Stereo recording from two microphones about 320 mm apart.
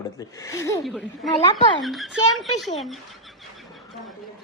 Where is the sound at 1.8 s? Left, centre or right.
Centre.